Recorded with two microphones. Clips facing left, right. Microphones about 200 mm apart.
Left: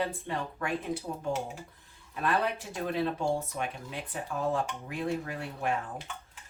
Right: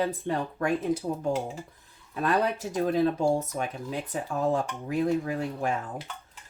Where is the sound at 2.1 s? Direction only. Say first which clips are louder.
Right 4 dB; 40° right (ahead or behind).